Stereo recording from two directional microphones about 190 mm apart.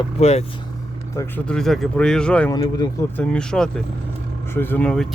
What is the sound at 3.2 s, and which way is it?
Speech, 5° left (ahead or behind).